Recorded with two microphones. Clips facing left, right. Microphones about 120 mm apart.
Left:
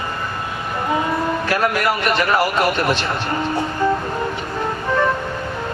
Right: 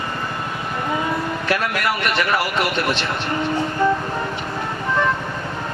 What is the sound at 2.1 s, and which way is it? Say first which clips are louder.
Speech: left 3 dB; 45° left (ahead or behind).